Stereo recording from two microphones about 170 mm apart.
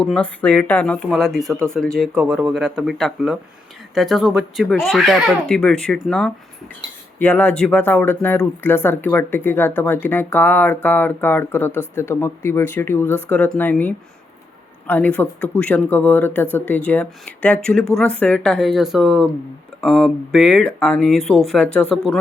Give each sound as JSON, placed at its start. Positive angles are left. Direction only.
{"t": 0.0, "sound": "speech", "side_deg": 5}